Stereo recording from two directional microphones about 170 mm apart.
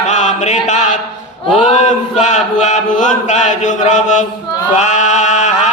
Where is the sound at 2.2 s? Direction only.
45° left (ahead or behind).